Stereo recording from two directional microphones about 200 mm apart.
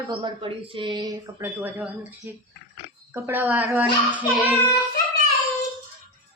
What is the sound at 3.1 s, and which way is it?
Speech, 10° right (ahead or behind).